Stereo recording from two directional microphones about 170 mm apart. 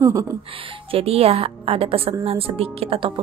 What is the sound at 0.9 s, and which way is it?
Speech, 35° right (ahead or behind).